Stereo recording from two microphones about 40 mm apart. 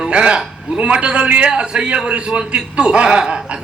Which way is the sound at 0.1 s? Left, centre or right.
Right.